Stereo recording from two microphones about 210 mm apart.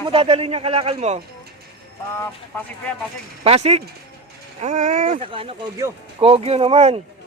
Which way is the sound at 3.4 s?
30° right (ahead or behind).